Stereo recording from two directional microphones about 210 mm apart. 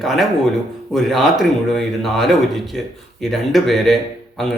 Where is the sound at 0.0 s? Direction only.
Centre (ahead or behind).